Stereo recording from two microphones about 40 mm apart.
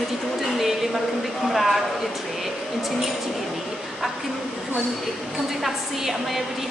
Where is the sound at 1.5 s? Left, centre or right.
Centre.